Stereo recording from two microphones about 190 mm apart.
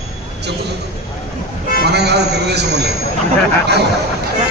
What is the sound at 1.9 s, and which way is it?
A man's voice, 60° right (ahead or behind).